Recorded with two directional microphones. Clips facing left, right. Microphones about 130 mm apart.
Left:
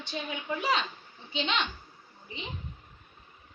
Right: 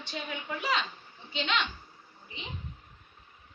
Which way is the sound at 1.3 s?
20° left (ahead or behind).